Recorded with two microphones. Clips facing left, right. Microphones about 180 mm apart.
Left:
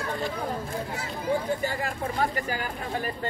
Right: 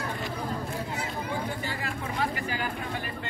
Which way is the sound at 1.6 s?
45° left (ahead or behind).